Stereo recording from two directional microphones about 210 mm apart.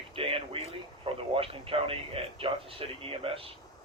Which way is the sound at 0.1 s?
25° right (ahead or behind).